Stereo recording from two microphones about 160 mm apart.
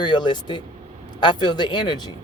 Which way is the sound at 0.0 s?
30° left (ahead or behind).